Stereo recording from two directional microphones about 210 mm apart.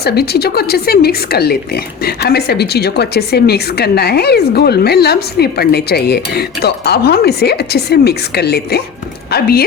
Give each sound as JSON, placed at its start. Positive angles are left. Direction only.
{"t": 0.0, "sound": "a woman's voice", "side_deg": 50}